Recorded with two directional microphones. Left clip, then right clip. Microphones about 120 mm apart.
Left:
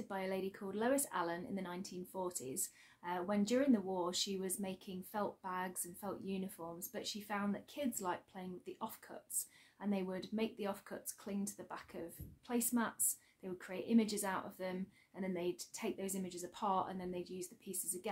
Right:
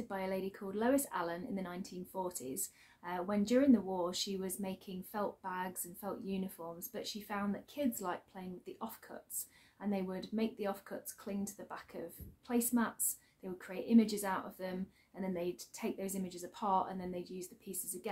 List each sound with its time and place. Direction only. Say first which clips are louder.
0.1 s a woman's voice: right 2 dB; 20° left (ahead or behind)